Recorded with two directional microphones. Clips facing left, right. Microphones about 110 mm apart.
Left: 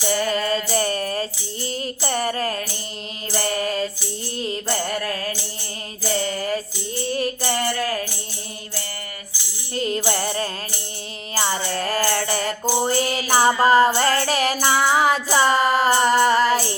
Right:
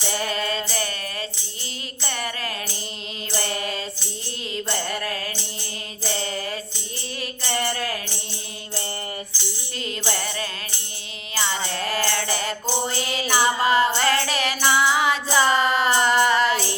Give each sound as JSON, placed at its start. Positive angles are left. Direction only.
{"t": 0.2, "sound": "music", "side_deg": 40}
{"t": 4.7, "sound": "a sound", "side_deg": 40}
{"t": 6.1, "sound": "music", "side_deg": 35}
{"t": 9.7, "sound": "music", "side_deg": 40}